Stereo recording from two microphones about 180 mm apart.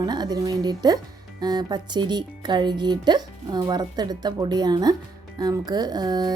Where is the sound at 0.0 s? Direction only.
25° right (ahead or behind).